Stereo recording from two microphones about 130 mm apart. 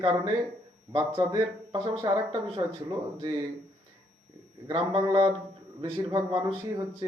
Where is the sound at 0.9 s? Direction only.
45° right (ahead or behind).